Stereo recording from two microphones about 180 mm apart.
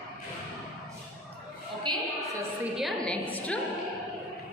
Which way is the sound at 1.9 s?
25° right (ahead or behind).